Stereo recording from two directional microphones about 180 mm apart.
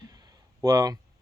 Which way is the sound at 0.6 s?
15° right (ahead or behind).